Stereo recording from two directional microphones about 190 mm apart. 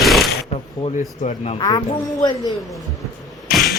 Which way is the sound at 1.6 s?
20° left (ahead or behind).